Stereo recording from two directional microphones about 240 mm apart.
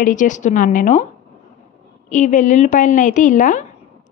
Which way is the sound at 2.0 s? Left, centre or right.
Left.